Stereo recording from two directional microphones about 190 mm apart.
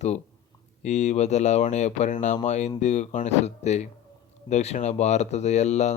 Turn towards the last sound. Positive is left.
turn(degrees=35)  # may be behind; listen again after turning